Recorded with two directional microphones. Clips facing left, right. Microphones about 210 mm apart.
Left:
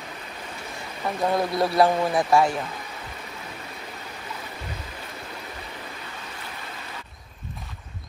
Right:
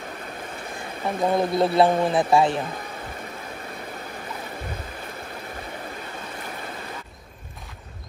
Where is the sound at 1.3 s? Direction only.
25° right (ahead or behind).